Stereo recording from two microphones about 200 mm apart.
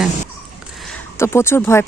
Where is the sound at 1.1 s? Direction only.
15° left (ahead or behind).